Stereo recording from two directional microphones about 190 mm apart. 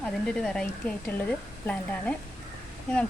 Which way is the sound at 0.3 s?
5° left (ahead or behind).